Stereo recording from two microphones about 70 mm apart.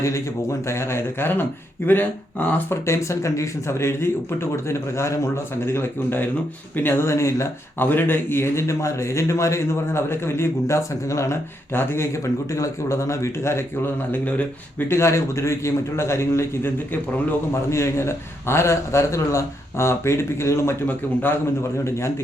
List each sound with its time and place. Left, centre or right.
0.7 s a man's voice: left
2.8 s a man's voice: left
7.8 s a man's voice: left
11.7 s a man's voice: left
14.1 s speech: left
14.8 s a man's voice: left
20.8 s speech: left
21.8 s a man's voice: left